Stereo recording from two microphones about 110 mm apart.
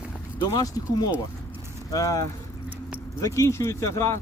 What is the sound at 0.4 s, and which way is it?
Speech, 35° left (ahead or behind).